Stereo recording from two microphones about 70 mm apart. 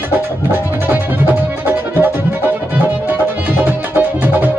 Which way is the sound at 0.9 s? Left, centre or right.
Right.